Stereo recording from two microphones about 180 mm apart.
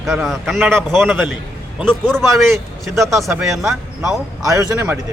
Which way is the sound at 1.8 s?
5° left (ahead or behind).